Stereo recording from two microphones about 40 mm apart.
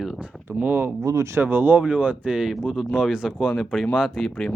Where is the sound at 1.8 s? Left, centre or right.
Right.